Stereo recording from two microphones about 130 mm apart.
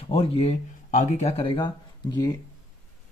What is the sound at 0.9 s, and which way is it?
Speech, 70° left (ahead or behind).